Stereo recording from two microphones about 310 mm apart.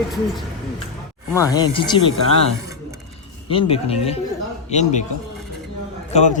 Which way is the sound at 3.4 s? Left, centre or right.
Centre.